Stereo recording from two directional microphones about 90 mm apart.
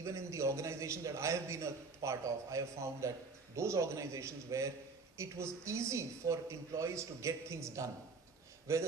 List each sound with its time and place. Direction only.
0.0 s a man's voice: 35° right (ahead or behind)